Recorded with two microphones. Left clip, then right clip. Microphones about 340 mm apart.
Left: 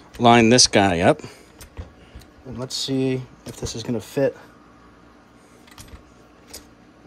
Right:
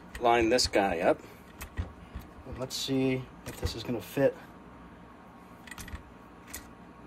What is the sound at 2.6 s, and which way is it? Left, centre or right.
Speech, left.